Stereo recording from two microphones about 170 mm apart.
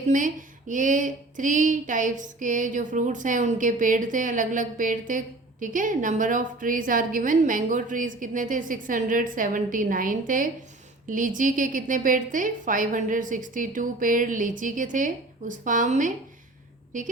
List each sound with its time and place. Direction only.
0.1 s speech: 50° right (ahead or behind)